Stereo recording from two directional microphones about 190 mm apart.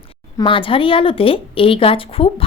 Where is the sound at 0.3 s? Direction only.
25° left (ahead or behind).